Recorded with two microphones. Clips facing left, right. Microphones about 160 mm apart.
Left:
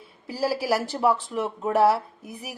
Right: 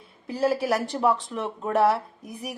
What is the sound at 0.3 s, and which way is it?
Speech, 5° left (ahead or behind).